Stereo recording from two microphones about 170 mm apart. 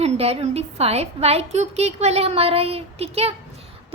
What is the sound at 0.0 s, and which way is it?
A woman's voice, 35° right (ahead or behind).